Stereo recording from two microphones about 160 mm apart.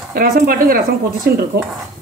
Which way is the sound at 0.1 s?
65° right (ahead or behind).